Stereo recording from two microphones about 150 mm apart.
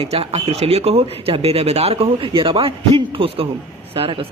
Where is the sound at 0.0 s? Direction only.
45° right (ahead or behind).